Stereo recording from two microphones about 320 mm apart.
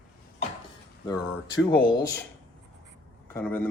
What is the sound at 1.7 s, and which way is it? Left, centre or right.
Speech, left.